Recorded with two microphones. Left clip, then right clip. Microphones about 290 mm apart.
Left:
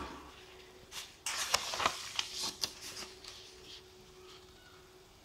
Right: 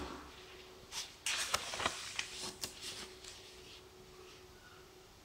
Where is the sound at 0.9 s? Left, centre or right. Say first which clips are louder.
Right 2 dB; centre.